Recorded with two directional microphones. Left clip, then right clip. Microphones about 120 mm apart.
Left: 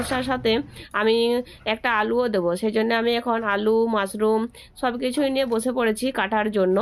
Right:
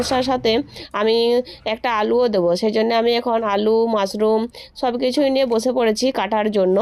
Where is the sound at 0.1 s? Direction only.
40° right (ahead or behind).